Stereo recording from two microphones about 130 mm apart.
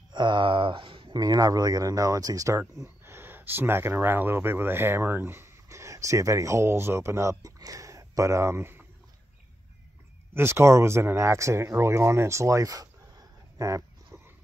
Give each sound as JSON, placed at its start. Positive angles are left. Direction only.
{"t": 0.1, "sound": "speech", "side_deg": -35}
{"t": 10.3, "sound": "speech", "side_deg": -20}
{"t": 13.6, "sound": "livestock", "side_deg": -25}